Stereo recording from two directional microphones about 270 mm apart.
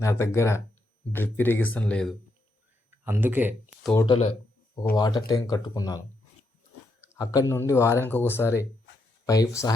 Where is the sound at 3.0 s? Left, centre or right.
Centre.